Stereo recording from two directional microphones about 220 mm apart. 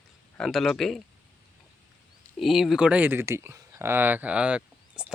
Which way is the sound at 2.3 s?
Centre (ahead or behind).